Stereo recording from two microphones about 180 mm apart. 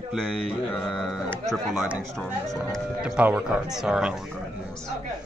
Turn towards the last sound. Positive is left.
turn(degrees=-5)  # may be behind; listen again after turning